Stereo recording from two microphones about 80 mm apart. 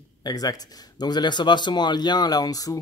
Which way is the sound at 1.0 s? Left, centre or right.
Left.